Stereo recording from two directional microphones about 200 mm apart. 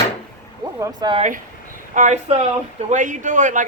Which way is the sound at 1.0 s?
20° right (ahead or behind).